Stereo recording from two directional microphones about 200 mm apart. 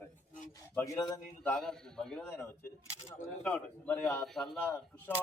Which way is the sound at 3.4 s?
5° left (ahead or behind).